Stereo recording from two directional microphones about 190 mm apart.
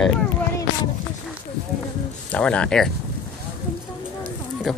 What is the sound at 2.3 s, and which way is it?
Speech, 5° left (ahead or behind).